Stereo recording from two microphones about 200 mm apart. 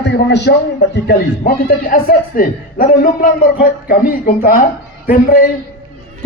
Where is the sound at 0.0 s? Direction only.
60° left (ahead or behind).